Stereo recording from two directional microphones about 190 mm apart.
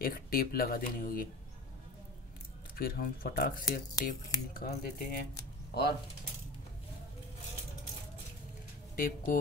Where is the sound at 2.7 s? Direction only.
50° left (ahead or behind).